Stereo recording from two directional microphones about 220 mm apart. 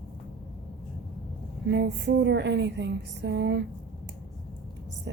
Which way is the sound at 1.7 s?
50° right (ahead or behind).